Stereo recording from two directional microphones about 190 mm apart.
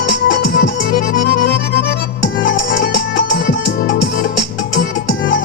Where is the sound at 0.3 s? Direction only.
70° left (ahead or behind).